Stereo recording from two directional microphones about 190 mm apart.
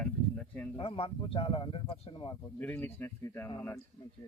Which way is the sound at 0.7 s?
25° left (ahead or behind).